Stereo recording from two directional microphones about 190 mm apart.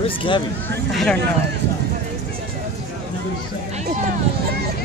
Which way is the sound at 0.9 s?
Centre (ahead or behind).